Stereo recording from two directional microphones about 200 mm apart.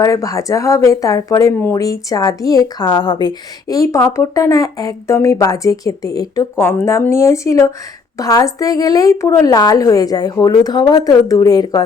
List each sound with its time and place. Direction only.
0.0 s a woman's voice: 15° left (ahead or behind)